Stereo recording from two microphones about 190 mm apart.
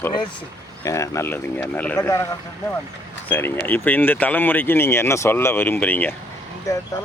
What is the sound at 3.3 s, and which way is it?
Speech, 10° left (ahead or behind).